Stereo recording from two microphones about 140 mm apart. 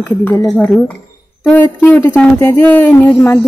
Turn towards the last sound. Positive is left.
turn(degrees=15)  # may be behind; listen again after turning